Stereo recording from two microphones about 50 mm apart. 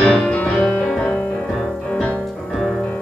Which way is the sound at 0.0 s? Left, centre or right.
Centre.